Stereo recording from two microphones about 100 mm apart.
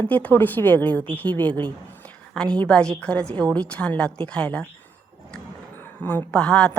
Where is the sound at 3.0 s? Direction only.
10° left (ahead or behind).